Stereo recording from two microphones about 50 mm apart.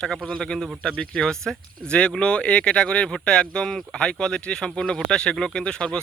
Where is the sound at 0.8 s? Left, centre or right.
Centre.